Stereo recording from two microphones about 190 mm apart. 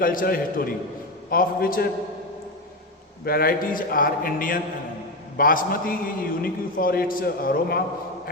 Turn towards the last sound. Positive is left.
turn(degrees=50)  # may be behind; listen again after turning